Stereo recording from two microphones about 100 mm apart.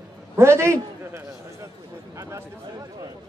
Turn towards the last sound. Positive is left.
turn(degrees=-40)  # may be behind; listen again after turning